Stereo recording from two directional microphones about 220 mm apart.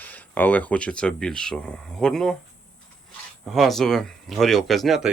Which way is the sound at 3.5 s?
Centre (ahead or behind).